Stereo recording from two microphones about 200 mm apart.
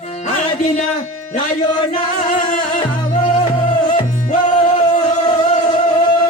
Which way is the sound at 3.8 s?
40° left (ahead or behind).